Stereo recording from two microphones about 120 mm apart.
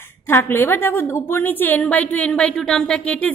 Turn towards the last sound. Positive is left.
turn(degrees=10)  # may be behind; listen again after turning